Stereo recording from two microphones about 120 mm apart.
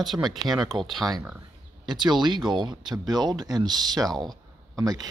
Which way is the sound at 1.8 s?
40° right (ahead or behind).